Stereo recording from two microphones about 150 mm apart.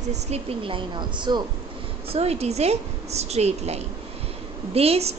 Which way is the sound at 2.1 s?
45° right (ahead or behind).